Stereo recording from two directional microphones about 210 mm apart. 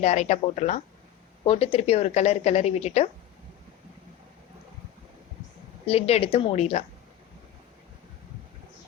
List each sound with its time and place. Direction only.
0.0 s a woman's voice: 30° left (ahead or behind)
5.8 s a woman's voice: 30° left (ahead or behind)